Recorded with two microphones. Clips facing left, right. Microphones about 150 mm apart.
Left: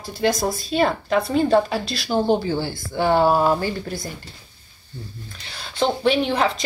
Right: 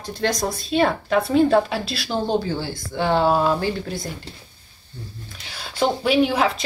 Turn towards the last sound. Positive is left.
turn(degrees=-5)  # may be behind; listen again after turning